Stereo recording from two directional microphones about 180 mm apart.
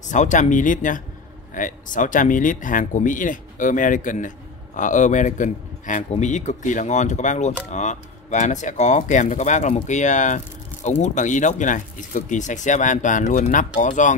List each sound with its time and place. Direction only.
0.0 s a man's voice: 45° left (ahead or behind)